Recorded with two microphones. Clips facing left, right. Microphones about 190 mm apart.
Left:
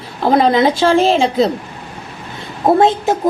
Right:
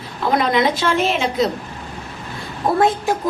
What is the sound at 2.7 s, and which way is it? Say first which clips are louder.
Speech: left 2 dB; 25° left (ahead or behind).